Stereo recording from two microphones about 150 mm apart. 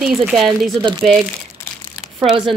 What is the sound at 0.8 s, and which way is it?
Speech, 25° right (ahead or behind).